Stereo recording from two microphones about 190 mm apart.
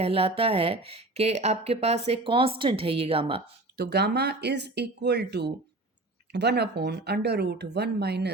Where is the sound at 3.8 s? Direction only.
60° right (ahead or behind).